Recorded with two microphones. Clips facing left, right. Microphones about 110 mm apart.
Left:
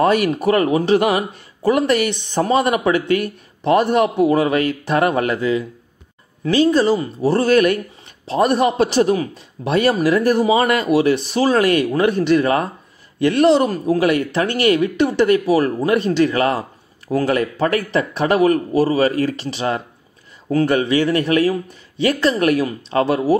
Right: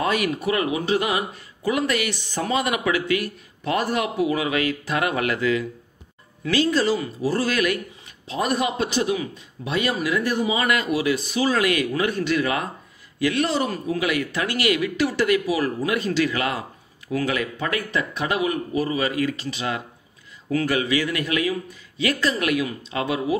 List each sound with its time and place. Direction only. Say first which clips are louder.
0.0 s speech: left 7 dB; 40° left (ahead or behind)
2.0 s speech: left 8 dB; 25° left (ahead or behind)
2.4 s speech: left 6 dB; 40° left (ahead or behind)
5.3 s a man's voice: left 3 dB; 25° left (ahead or behind); by 14.2 s 45° left (ahead or behind)
14.3 s speech: left 7 dB; 30° left (ahead or behind)